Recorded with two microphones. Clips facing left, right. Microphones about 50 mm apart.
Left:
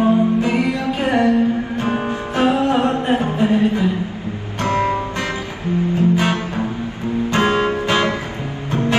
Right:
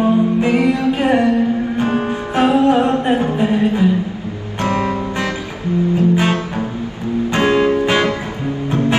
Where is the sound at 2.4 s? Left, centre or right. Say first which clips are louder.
Right 3 dB; right.